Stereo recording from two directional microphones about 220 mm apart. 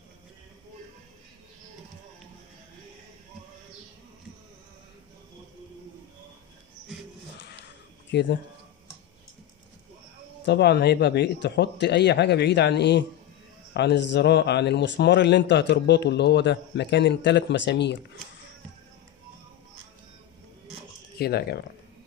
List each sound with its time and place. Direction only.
8.1 s speech: 50° left (ahead or behind)
10.4 s a man's voice: 50° left (ahead or behind)
21.2 s a man's voice: 45° left (ahead or behind)